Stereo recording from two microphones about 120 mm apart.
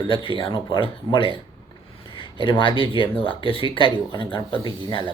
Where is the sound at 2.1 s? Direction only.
45° left (ahead or behind).